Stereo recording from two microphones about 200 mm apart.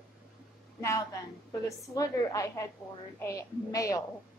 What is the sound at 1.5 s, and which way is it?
A woman's voice, 15° left (ahead or behind).